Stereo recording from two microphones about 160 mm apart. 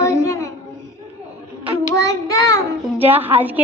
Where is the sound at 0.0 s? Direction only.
20° left (ahead or behind).